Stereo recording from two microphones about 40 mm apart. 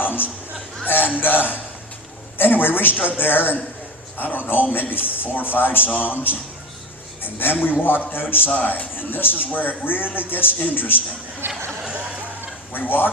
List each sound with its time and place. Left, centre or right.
0.0 s a sound: left
0.9 s speech: left
5.9 s a man's voice: left
7.2 s a man's voice: left
8.4 s a man's voice: left
11.3 s speech: right
12.7 s speech: left